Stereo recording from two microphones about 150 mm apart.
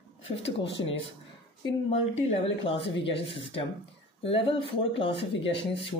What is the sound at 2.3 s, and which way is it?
Speech, 40° left (ahead or behind).